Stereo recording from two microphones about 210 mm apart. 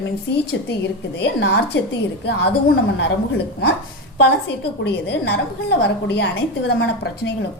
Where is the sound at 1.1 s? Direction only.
55° left (ahead or behind).